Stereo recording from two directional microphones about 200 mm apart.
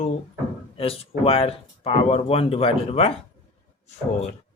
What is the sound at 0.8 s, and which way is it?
Speech, 30° left (ahead or behind).